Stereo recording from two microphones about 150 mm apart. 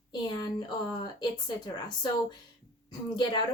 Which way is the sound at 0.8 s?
30° left (ahead or behind).